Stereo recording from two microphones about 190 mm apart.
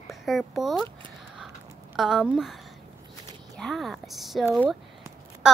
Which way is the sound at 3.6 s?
Centre (ahead or behind).